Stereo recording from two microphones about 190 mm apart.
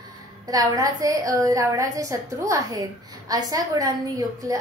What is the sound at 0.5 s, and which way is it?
A woman's voice, 20° right (ahead or behind).